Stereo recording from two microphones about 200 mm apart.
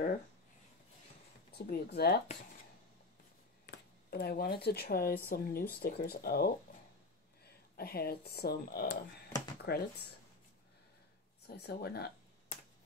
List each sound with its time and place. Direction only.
1.5 s speech: 55° left (ahead or behind)
3.6 s speech: 55° left (ahead or behind)
9.6 s a sound: 50° left (ahead or behind)
11.4 s speech: 55° left (ahead or behind)